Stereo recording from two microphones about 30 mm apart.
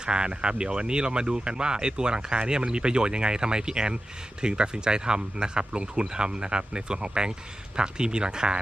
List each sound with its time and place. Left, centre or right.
0.0 s speech: right